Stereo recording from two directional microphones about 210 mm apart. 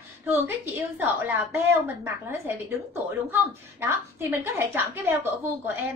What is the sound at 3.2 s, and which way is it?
A woman's voice, 10° right (ahead or behind).